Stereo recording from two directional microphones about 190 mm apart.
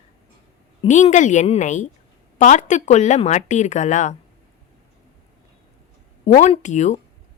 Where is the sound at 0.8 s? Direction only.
35° left (ahead or behind).